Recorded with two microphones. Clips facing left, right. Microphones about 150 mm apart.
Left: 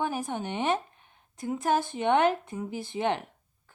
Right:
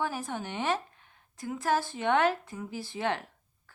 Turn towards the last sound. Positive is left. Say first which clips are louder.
# left 3 dB
turn(degrees=20)  # may be behind; listen again after turning